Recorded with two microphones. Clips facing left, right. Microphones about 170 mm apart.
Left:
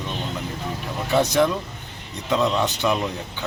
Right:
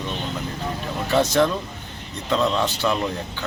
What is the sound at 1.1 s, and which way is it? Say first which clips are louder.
Speech: even; 15° left (ahead or behind).